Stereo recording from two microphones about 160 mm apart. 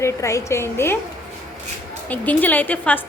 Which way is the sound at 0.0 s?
20° left (ahead or behind).